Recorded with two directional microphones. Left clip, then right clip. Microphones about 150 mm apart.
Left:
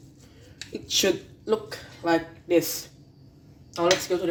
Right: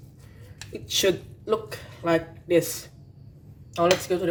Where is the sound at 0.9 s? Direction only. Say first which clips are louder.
Even; 15° left (ahead or behind).